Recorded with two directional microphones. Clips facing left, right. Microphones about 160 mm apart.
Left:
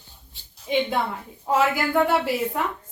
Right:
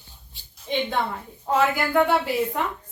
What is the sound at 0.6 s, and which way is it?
A woman's voice, 5° left (ahead or behind).